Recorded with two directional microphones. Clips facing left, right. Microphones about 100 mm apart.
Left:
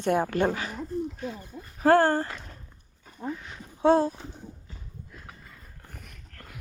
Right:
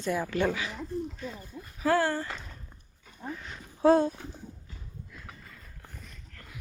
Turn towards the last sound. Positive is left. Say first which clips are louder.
# left 2 dB
turn(degrees=65)  # may be behind; listen again after turning